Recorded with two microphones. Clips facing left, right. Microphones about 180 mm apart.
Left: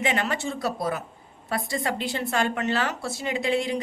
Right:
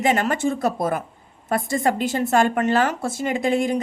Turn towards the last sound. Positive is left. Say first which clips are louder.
# right 5 dB
turn(degrees=-45)  # may be behind; listen again after turning